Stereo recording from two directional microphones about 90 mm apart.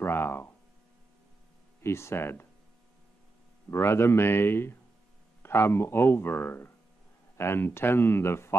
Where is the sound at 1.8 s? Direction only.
30° left (ahead or behind).